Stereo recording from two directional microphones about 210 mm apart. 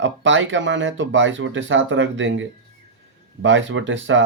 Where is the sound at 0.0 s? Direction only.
60° right (ahead or behind).